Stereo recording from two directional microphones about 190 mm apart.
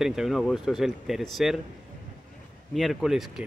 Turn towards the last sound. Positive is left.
turn(degrees=0)  # may be behind; listen again after turning